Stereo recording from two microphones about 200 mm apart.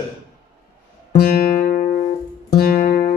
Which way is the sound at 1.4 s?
45° left (ahead or behind).